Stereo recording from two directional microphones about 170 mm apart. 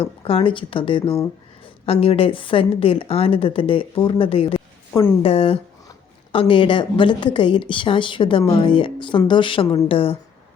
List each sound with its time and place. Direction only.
0.0 s a woman's voice: 35° left (ahead or behind)